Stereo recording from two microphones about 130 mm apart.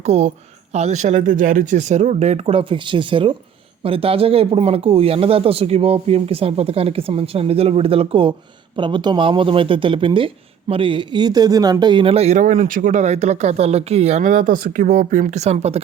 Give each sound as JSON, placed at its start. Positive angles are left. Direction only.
{"t": 0.0, "sound": "speech", "side_deg": -55}